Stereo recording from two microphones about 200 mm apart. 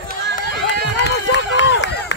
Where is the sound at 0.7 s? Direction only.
60° left (ahead or behind).